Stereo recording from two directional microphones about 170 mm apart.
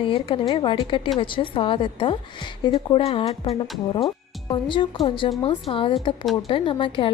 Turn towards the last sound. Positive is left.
turn(degrees=30)  # may be behind; listen again after turning